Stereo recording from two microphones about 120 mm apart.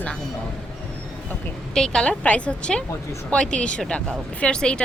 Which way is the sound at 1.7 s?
5° left (ahead or behind).